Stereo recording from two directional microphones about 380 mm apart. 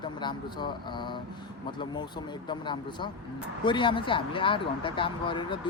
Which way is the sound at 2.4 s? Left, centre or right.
Centre.